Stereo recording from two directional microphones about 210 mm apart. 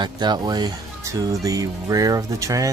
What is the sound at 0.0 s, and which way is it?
Speech, 20° right (ahead or behind).